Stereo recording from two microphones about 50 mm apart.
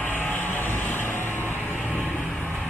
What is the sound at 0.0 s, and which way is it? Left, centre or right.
Vehicle, left.